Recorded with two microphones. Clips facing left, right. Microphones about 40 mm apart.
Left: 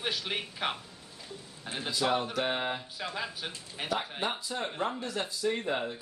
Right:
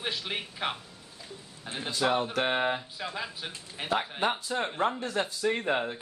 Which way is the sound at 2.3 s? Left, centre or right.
Right.